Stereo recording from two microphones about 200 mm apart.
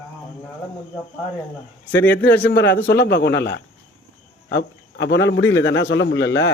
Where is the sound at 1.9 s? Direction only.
10° left (ahead or behind).